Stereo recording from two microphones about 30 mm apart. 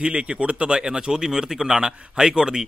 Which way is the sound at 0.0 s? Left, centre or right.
Right.